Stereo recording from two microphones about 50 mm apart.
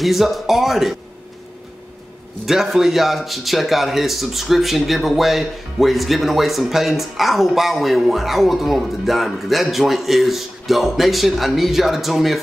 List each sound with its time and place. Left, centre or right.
0.0 s a man's voice: centre
2.4 s a man's voice: centre